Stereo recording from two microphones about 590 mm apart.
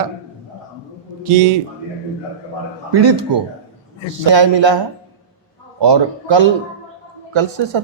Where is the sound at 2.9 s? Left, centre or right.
Right.